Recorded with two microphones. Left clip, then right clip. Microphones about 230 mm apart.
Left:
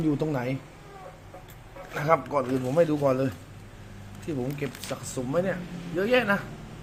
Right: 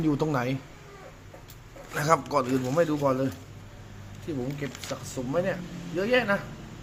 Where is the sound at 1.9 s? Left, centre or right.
Centre.